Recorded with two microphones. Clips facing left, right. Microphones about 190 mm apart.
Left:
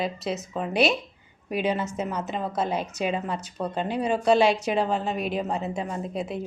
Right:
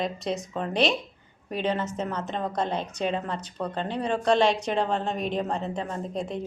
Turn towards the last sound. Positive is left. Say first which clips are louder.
# left 1 dB
turn(degrees=5)  # may be behind; listen again after turning